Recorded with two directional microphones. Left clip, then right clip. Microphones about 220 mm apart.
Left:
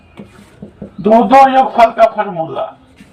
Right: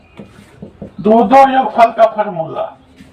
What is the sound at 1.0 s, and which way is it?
A man's voice, 15° left (ahead or behind).